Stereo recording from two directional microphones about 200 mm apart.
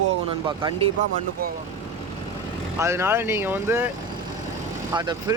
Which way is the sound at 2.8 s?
15° right (ahead or behind).